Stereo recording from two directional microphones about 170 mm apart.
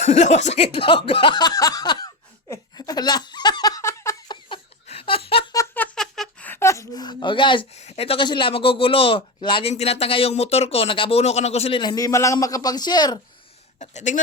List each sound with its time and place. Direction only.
0.0 s speech: 40° left (ahead or behind); by 2.0 s 25° left (ahead or behind)
2.5 s laughter: 20° left (ahead or behind)
4.4 s a sound: 30° left (ahead or behind)
5.5 s a sound: 10° left (ahead or behind); by 7.6 s 30° left (ahead or behind)
7.8 s speech: 40° left (ahead or behind)
11.8 s a man's voice: 20° left (ahead or behind)
13.7 s speech: 45° left (ahead or behind)